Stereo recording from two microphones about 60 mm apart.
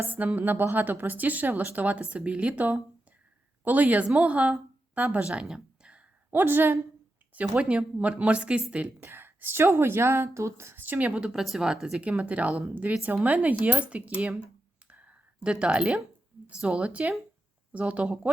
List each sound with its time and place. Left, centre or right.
0.0 s a woman's voice: right
5.5 s a sound: centre
6.3 s a woman's voice: right
7.5 s speech: centre
9.0 s a woman's voice: right
10.8 s speech: right
11.3 s speech: centre; by 14.4 s right
14.8 s a sound: right
15.4 s speech: centre